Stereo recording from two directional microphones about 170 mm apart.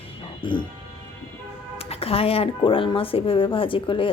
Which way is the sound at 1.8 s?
35° left (ahead or behind).